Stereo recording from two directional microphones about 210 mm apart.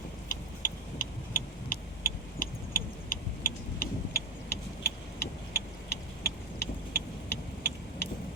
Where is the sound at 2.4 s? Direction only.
40° left (ahead or behind).